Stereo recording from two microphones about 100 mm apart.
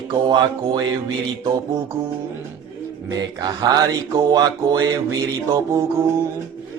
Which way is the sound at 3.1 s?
45° right (ahead or behind).